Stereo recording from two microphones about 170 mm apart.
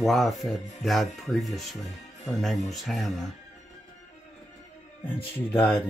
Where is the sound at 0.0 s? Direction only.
Centre (ahead or behind).